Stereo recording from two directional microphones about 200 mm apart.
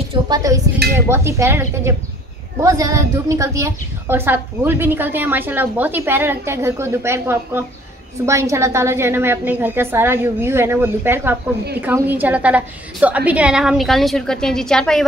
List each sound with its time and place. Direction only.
0.1 s a woman's voice: 20° right (ahead or behind); by 15.0 s 5° left (ahead or behind)